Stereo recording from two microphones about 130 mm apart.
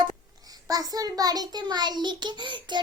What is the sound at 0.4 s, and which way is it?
A child's voice, 30° right (ahead or behind).